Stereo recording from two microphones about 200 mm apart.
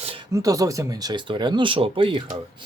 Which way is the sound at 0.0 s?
25° right (ahead or behind).